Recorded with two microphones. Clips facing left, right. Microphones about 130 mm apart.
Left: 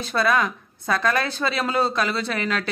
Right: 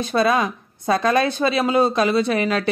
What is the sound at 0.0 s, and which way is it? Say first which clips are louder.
Speech: right 3 dB; 20° right (ahead or behind).